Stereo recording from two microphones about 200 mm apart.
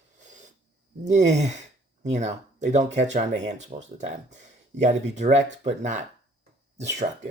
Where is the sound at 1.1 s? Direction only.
35° right (ahead or behind).